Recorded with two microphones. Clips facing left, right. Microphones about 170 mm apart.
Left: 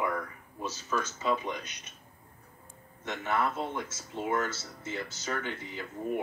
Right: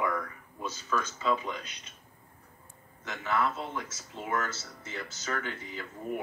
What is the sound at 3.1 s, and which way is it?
Speech, 25° left (ahead or behind).